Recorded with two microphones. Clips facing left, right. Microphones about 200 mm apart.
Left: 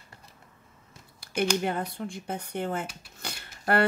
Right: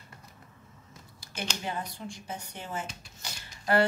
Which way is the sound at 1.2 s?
60° left (ahead or behind).